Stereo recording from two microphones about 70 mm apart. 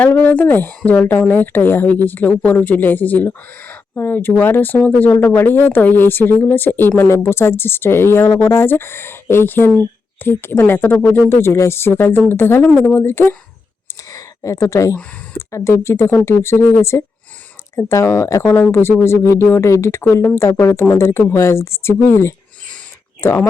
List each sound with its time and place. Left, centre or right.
0.1 s a woman's voice: left
14.1 s a sound: left
15.4 s speech: left